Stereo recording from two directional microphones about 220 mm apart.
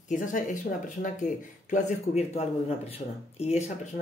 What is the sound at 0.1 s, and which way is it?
Speech, 35° left (ahead or behind).